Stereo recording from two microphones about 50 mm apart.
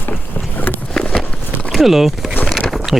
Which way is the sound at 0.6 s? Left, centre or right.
Left.